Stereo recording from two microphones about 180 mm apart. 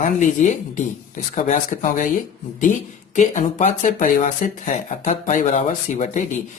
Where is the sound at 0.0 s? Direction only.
40° left (ahead or behind).